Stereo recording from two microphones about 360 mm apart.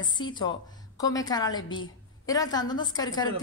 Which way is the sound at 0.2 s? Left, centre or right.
Centre.